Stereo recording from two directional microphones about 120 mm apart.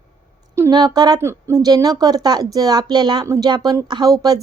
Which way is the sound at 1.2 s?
25° right (ahead or behind).